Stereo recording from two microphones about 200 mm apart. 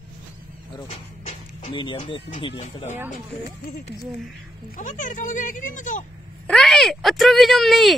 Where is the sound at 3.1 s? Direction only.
50° left (ahead or behind).